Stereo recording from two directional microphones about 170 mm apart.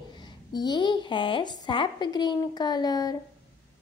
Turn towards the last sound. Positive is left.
turn(degrees=20)  # may be behind; listen again after turning